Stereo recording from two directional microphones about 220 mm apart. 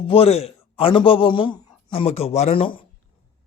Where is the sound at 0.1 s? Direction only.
25° left (ahead or behind).